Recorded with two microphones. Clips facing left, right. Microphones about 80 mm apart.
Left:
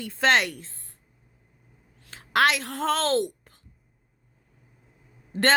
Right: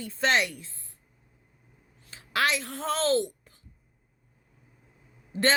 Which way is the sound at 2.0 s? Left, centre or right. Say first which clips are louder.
Left 5 dB; left.